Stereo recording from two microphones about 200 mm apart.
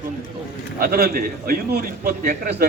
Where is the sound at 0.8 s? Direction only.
50° right (ahead or behind).